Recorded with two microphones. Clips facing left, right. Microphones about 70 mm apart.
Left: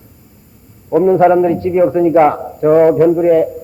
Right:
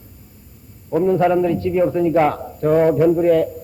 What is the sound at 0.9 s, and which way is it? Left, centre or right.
A man's voice, left.